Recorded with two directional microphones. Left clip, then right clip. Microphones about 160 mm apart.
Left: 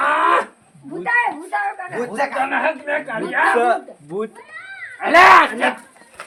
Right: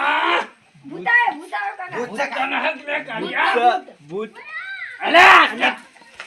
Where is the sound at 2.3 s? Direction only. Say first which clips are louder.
Left 2 dB; 5° right (ahead or behind).